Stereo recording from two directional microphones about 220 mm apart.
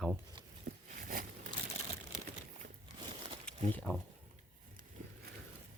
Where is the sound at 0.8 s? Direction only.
35° right (ahead or behind).